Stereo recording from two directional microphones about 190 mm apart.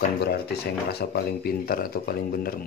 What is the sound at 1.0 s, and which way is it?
Speech, 55° left (ahead or behind).